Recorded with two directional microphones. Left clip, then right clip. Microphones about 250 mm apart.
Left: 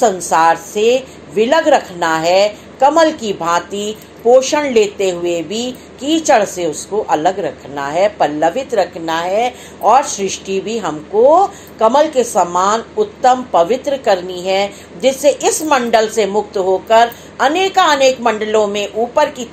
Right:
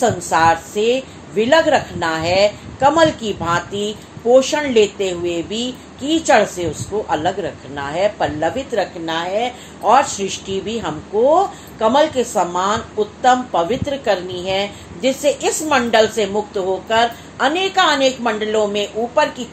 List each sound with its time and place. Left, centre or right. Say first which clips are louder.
0.0 s a woman's voice: left 3 dB; centre